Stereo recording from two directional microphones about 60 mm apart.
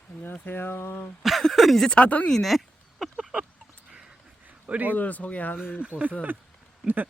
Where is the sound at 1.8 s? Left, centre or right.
Centre.